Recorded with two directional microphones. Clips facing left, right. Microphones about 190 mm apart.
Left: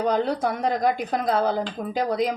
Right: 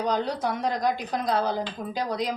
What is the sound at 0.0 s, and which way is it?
A woman's voice, 55° left (ahead or behind).